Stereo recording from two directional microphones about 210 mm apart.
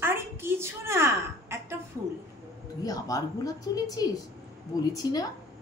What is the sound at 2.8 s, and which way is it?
A woman's voice, 15° left (ahead or behind).